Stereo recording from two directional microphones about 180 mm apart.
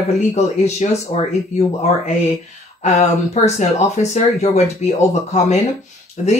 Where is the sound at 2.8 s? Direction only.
40° left (ahead or behind).